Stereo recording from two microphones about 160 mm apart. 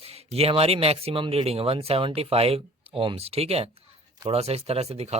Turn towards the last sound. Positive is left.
turn(degrees=-40)  # may be behind; listen again after turning